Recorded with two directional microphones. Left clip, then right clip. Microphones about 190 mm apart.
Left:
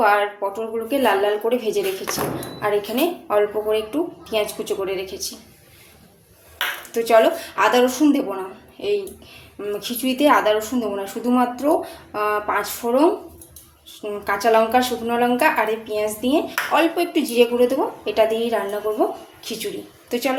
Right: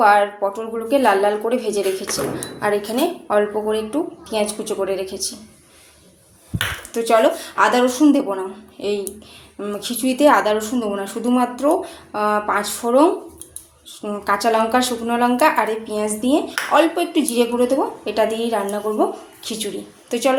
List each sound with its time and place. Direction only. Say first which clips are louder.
0.0 s a woman's voice: right 4 dB; 15° right (ahead or behind)
6.9 s a woman's voice: even; 15° right (ahead or behind)